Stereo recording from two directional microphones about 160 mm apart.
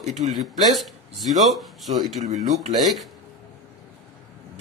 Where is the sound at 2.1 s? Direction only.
45° right (ahead or behind).